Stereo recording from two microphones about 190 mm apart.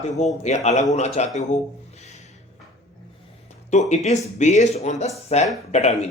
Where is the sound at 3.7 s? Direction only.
35° left (ahead or behind).